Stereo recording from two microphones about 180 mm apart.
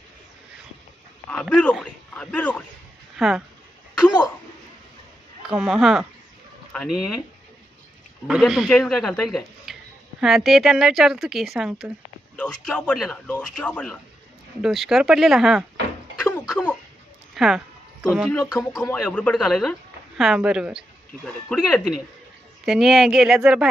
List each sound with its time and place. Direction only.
1.3 s speech: 5° left (ahead or behind)
5.4 s speech: 5° right (ahead or behind)
8.3 s speech: centre (ahead or behind)
16.3 s cough: 5° left (ahead or behind)
17.3 s a sound: centre (ahead or behind)
18.5 s speech: 20° left (ahead or behind)
19.0 s speech: 5° left (ahead or behind)